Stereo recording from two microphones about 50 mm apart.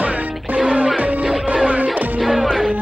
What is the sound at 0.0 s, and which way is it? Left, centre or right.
Music, right.